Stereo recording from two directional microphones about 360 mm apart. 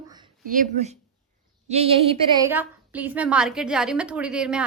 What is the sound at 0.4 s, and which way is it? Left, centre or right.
A woman's voice, right.